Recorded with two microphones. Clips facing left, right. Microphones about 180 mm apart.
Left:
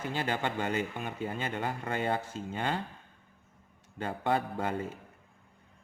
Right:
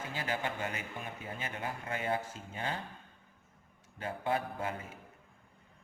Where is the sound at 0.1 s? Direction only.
70° left (ahead or behind).